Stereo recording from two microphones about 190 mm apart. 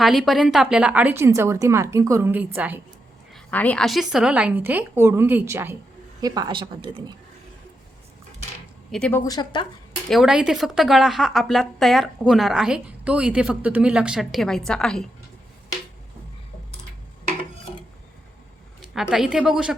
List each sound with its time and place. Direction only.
0.0 s a woman's voice: centre (ahead or behind)
3.3 s a woman's voice: 10° left (ahead or behind); by 7.0 s 25° right (ahead or behind)
8.9 s speech: 5° left (ahead or behind)
9.2 s a woman's voice: 20° left (ahead or behind)
10.1 s speech: centre (ahead or behind)
18.8 s a woman's voice: centre (ahead or behind)